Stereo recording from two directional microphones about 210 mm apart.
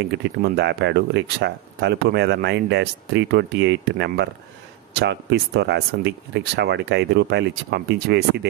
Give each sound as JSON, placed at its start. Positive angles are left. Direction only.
{"t": 0.1, "sound": "speech", "side_deg": -55}